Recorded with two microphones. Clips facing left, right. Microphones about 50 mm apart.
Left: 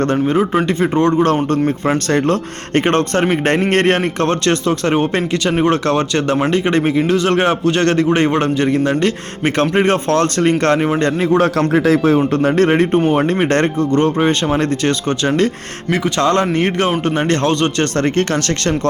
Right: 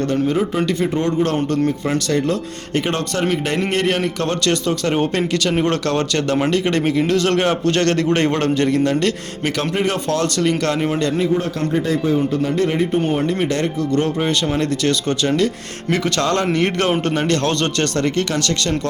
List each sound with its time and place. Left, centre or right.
0.3 s a man's voice: left
4.9 s a man's voice: left
9.6 s a man's voice: left
11.3 s speech: left
12.1 s a man's voice: left
14.6 s a man's voice: left
15.9 s speech: centre
16.2 s a man's voice: left
17.9 s a man's voice: left